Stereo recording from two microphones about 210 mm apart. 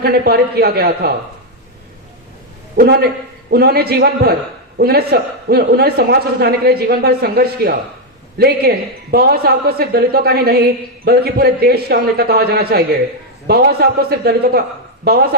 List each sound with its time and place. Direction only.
0.0 s a woman's voice: 50° right (ahead or behind)
2.7 s a woman's voice: 50° right (ahead or behind)